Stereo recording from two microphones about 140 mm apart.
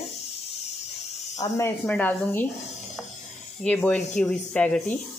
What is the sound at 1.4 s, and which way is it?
Speech, 30° left (ahead or behind).